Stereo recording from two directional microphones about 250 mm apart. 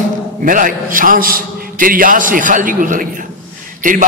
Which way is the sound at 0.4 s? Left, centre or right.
Right.